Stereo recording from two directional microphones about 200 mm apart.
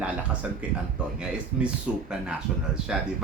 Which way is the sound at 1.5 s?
5° right (ahead or behind).